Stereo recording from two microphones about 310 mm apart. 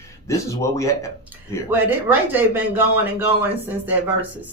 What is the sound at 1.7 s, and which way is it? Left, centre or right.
Speech, centre.